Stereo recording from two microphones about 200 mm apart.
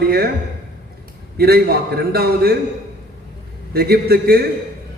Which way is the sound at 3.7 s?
50° right (ahead or behind).